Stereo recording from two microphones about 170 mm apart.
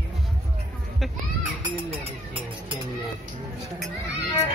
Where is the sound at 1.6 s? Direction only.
25° right (ahead or behind).